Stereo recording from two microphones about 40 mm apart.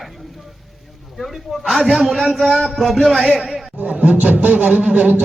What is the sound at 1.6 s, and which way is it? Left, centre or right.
A man's voice, centre.